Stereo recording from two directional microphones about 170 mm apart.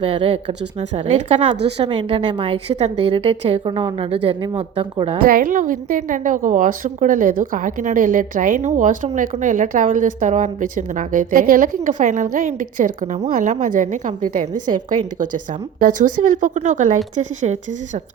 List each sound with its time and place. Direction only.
0.0 s a woman's voice: 30° right (ahead or behind)
0.8 s a woman's voice: 40° right (ahead or behind)
5.2 s a woman's voice: 55° right (ahead or behind)
15.8 s a woman's voice: 50° right (ahead or behind)